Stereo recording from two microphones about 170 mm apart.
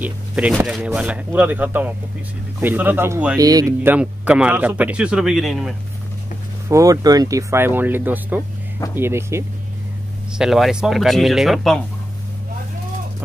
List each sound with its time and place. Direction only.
0.0 s speech: 10° right (ahead or behind)
6.7 s speech: 20° right (ahead or behind)
10.3 s speech: centre (ahead or behind)